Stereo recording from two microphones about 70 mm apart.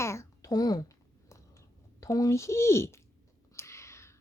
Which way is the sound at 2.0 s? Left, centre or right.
Left.